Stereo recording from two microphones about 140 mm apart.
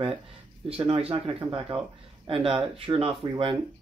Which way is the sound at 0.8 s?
45° right (ahead or behind).